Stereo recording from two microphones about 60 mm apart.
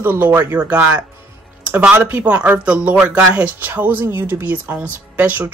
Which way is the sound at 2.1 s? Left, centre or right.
Right.